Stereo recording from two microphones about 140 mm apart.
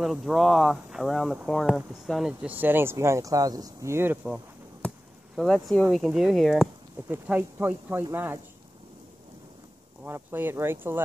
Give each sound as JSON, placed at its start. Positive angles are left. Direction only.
{"t": 0.0, "sound": "speech", "side_deg": 0}
{"t": 4.8, "sound": "chop", "side_deg": 5}
{"t": 5.9, "sound": "speech", "side_deg": -5}
{"t": 7.1, "sound": "speech", "side_deg": -15}
{"t": 10.0, "sound": "speech", "side_deg": -15}